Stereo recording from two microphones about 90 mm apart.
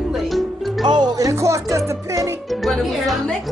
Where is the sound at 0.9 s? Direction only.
55° right (ahead or behind); by 2.2 s 35° right (ahead or behind).